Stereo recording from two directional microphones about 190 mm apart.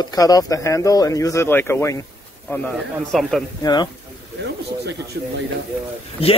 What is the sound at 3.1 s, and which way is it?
Speech, centre (ahead or behind).